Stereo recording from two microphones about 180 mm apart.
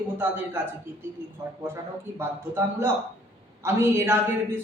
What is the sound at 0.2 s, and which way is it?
A man's voice, 15° right (ahead or behind).